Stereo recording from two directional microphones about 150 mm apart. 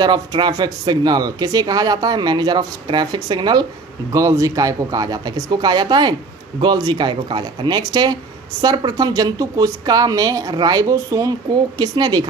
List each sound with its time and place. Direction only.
0.0 s speech: 30° right (ahead or behind)